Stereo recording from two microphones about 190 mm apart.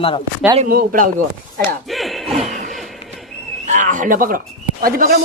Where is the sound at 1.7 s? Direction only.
Centre (ahead or behind).